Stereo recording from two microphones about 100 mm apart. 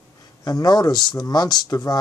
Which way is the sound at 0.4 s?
40° left (ahead or behind).